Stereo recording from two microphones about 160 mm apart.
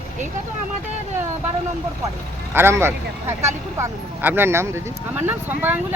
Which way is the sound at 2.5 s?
15° right (ahead or behind).